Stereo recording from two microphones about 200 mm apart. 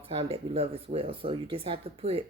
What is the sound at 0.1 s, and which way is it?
Speech, 30° right (ahead or behind).